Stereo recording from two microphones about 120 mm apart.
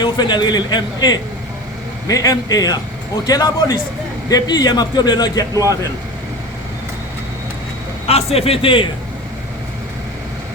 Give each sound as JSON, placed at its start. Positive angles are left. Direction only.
{"t": 0.0, "sound": "a man's voice", "side_deg": 35}
{"t": 8.0, "sound": "a man's voice", "side_deg": 60}